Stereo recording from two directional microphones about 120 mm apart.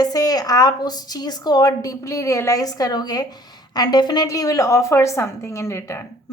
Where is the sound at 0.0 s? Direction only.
30° left (ahead or behind).